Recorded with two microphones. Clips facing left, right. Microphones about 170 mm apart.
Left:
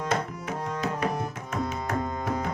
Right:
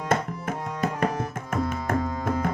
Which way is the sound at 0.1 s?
50° right (ahead or behind).